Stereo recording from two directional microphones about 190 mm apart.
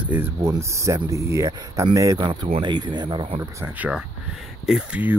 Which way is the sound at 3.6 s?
5° right (ahead or behind).